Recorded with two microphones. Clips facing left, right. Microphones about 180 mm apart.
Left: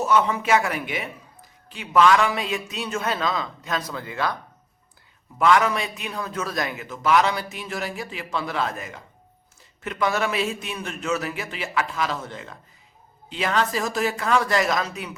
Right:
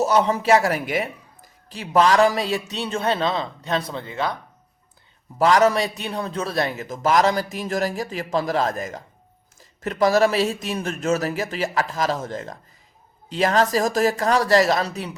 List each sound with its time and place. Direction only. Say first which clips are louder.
0.0 s a man's voice: right 2 dB; 35° right (ahead or behind)
5.4 s a man's voice: right 3 dB; 35° right (ahead or behind)